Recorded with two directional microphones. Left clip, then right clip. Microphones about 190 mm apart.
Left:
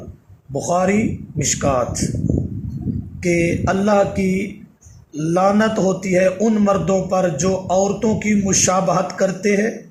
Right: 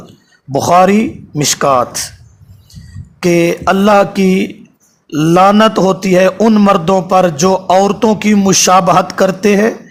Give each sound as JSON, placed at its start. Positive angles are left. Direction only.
{"t": 0.6, "sound": "a man's voice", "side_deg": -35}
{"t": 3.2, "sound": "a man's voice", "side_deg": -35}